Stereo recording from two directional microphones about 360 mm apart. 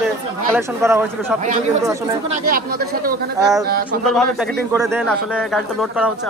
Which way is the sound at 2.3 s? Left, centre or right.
Right.